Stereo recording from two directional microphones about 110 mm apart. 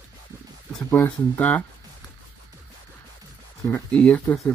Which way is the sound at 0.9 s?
15° left (ahead or behind).